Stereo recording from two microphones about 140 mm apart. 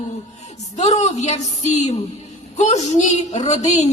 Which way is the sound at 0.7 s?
55° left (ahead or behind).